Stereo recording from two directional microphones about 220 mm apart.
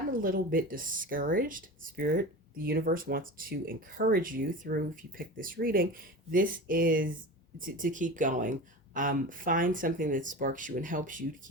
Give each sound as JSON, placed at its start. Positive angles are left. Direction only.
{"t": 0.1, "sound": "speech", "side_deg": -40}